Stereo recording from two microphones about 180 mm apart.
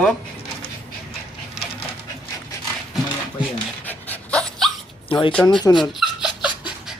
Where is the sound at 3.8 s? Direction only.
10° left (ahead or behind).